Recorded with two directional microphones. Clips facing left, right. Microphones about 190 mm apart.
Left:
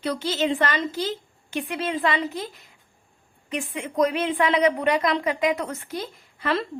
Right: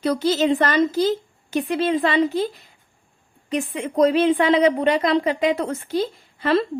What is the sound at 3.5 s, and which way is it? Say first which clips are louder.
A woman's voice: right 5 dB; 35° right (ahead or behind).